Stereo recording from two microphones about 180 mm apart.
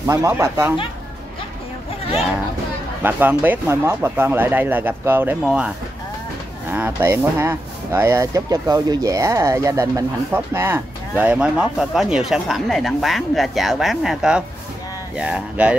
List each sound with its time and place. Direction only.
0.0 s speech: 15° right (ahead or behind)
3.0 s speech: 10° right (ahead or behind)
6.7 s speech: 10° right (ahead or behind)